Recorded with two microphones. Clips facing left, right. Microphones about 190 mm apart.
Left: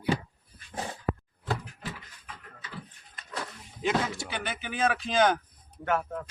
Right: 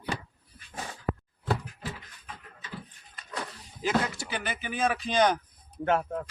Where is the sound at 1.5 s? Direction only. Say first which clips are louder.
Right 2 dB; 30° right (ahead or behind).